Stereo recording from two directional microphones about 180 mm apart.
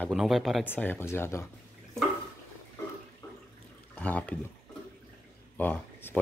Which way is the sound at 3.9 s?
10° left (ahead or behind).